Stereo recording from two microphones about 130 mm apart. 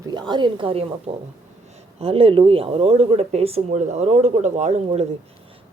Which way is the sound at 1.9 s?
50° right (ahead or behind).